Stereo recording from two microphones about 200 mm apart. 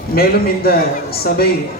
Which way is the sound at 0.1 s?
50° left (ahead or behind).